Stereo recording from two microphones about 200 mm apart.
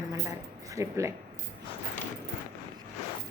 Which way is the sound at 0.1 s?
15° right (ahead or behind).